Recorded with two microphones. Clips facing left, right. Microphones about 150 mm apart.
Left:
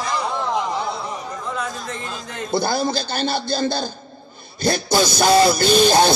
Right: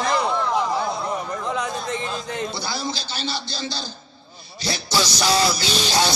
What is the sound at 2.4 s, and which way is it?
Music, 50° left (ahead or behind).